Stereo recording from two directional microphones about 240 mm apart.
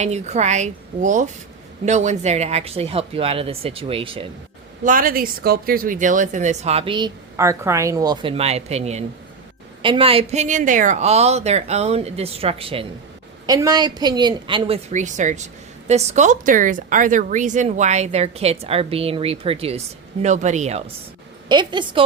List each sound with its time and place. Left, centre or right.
0.0 s speech: right
4.8 s speech: right; by 22.0 s centre